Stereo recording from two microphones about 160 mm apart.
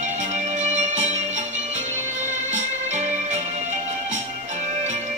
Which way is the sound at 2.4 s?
45° right (ahead or behind).